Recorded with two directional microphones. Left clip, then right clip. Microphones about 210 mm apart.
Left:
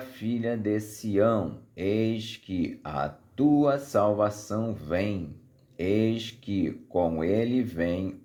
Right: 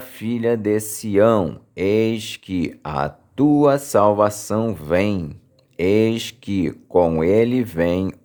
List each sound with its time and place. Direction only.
0.0 s speech: 35° right (ahead or behind)